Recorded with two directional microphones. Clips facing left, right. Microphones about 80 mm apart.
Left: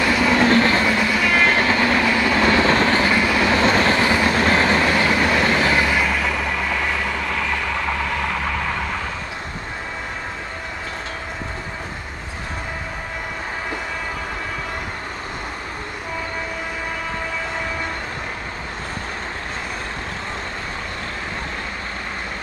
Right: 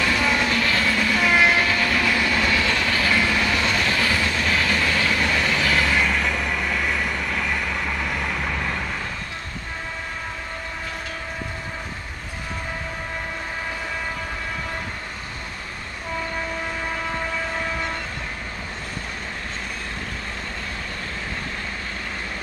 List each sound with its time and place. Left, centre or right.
0.0 s train: centre
0.4 s train: left
0.8 s train: centre
1.2 s train: centre
1.5 s train: left
3.4 s vehicle: left
4.0 s train: left
4.3 s train: left
5.9 s vehicle: centre